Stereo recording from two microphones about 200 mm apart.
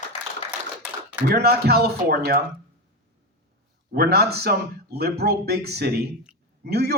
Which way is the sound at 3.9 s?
50° right (ahead or behind).